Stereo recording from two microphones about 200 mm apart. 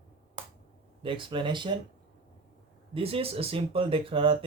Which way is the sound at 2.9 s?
30° right (ahead or behind).